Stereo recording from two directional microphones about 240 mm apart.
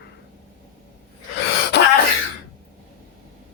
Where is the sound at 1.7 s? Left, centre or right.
Left.